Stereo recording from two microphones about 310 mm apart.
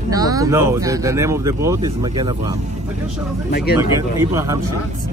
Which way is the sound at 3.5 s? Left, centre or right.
Left.